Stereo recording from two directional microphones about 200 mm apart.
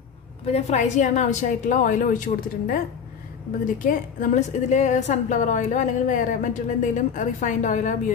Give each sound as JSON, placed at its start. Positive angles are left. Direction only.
{"t": 0.5, "sound": "a woman's voice", "side_deg": 35}